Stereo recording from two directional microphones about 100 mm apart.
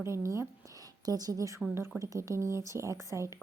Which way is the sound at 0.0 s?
30° right (ahead or behind).